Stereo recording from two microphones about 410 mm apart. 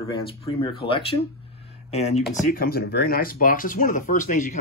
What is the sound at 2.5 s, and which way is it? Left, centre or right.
Speech, left.